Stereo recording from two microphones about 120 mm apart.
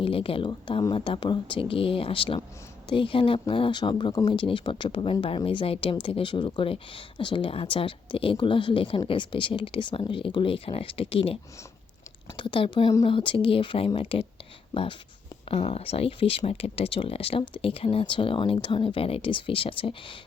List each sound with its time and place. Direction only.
0.0 s speech: 50° left (ahead or behind)
12.4 s speech: 45° left (ahead or behind)